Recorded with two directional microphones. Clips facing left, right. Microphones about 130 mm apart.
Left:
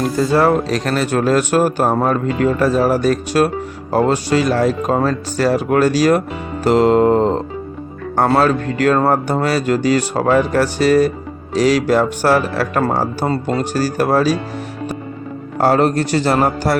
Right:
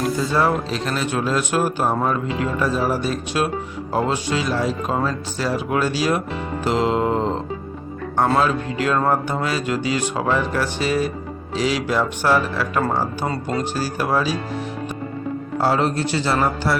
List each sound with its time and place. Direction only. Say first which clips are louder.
0.2 s speech: left 9 dB; 50° left (ahead or behind)
15.5 s speech: left 6 dB; 50° left (ahead or behind)